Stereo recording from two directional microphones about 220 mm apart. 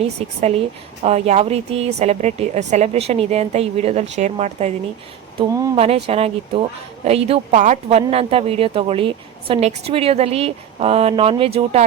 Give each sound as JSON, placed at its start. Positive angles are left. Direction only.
{"t": 0.0, "sound": "speech", "side_deg": -30}